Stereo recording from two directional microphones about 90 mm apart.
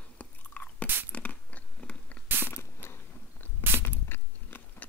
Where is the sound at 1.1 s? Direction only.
15° left (ahead or behind).